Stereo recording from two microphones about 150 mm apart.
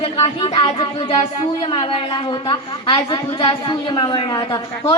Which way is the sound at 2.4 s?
30° left (ahead or behind).